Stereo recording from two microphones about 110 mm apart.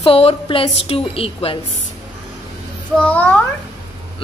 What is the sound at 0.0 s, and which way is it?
A woman's voice, 65° left (ahead or behind).